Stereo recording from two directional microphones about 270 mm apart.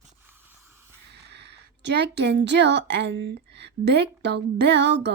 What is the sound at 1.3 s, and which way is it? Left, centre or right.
A woman's voice, right.